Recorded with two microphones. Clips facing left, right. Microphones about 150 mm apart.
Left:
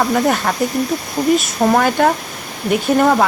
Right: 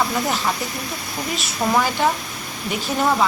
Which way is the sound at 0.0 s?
55° left (ahead or behind).